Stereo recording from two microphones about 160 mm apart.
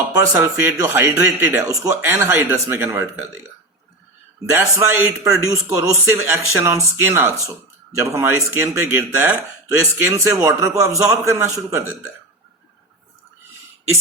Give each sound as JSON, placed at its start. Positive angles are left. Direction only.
{"t": 0.1, "sound": "speech", "side_deg": -20}
{"t": 4.5, "sound": "a man's voice", "side_deg": -15}